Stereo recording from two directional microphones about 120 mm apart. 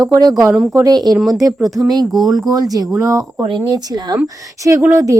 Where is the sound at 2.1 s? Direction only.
Centre (ahead or behind).